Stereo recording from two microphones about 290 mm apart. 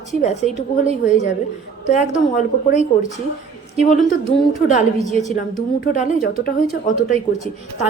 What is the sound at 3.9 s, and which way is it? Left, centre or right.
Speech, left.